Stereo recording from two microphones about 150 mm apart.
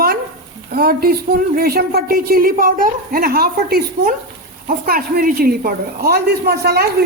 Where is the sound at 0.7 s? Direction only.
80° right.